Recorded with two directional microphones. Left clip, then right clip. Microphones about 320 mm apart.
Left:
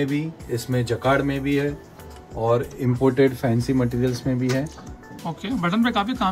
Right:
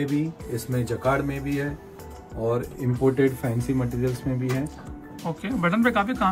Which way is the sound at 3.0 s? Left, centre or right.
Left.